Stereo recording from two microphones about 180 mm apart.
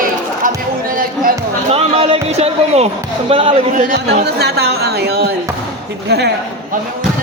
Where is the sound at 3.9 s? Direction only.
70° right (ahead or behind).